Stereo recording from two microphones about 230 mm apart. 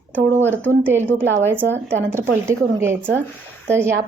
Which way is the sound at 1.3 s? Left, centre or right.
Right.